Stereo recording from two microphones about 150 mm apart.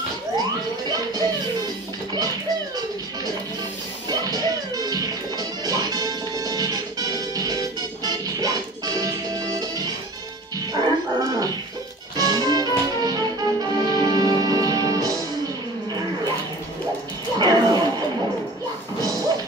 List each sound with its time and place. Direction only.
4.1 s music: 25° right (ahead or behind)
10.7 s music: 25° right (ahead or behind)
17.4 s a sound: 25° right (ahead or behind)